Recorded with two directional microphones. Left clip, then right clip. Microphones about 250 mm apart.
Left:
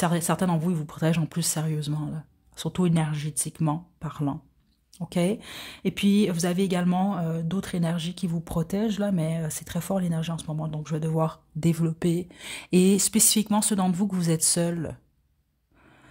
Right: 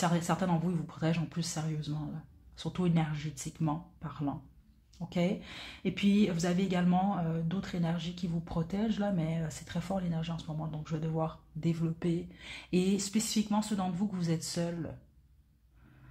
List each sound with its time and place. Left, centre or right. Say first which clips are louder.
0.0 s speech: left 6 dB; left